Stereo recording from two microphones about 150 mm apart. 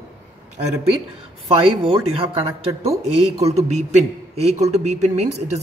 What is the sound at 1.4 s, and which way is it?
A man's voice, 40° right (ahead or behind).